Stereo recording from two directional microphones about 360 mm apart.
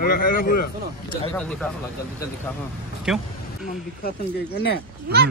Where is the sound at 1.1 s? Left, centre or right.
Centre.